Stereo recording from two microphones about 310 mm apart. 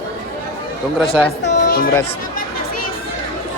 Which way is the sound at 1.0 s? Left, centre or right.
Centre.